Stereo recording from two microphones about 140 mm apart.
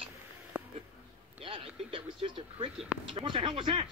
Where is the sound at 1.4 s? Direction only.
40° right (ahead or behind).